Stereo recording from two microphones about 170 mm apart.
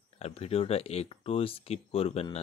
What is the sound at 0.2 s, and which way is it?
Speech, 35° left (ahead or behind).